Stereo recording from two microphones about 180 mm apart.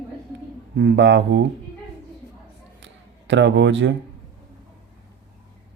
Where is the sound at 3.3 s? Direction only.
90° right.